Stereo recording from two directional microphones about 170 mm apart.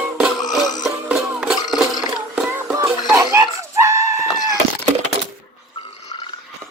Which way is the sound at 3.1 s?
15° right (ahead or behind).